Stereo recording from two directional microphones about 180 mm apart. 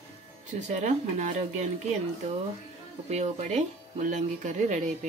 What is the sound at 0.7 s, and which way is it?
Speech, 40° right (ahead or behind).